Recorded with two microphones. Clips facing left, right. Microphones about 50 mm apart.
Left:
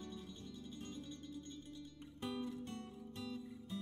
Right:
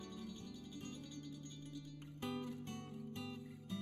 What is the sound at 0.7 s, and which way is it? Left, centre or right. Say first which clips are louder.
Music: even; left.